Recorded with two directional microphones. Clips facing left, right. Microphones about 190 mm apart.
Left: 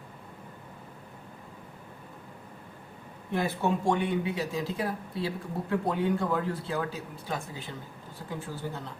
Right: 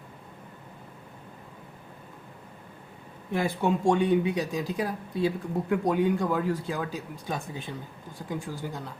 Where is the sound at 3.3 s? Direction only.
15° right (ahead or behind).